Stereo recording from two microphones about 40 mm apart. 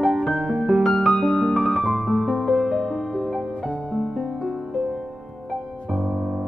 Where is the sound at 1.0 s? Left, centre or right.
Centre.